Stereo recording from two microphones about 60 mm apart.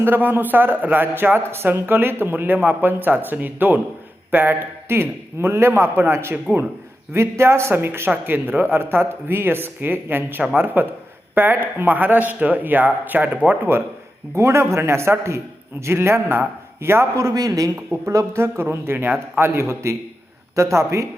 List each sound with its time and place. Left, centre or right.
0.0 s a man's voice: right
6.3 s speech: right
7.1 s a man's voice: right
14.3 s a man's voice: right
18.0 s a man's voice: right
19.5 s a man's voice: right